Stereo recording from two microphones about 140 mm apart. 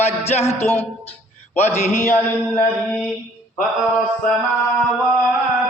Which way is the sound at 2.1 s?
15° left (ahead or behind).